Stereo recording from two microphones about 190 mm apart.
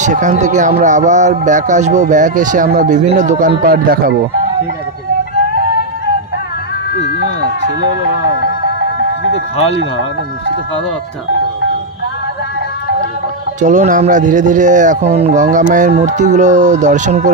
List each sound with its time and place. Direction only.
0.0 s speech: 40° right (ahead or behind)
13.6 s speech: 40° right (ahead or behind)